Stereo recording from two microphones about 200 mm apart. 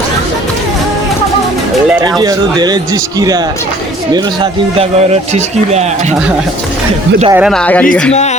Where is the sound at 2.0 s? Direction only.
20° right (ahead or behind).